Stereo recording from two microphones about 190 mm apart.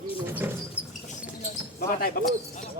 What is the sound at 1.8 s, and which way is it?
Speech, 50° left (ahead or behind).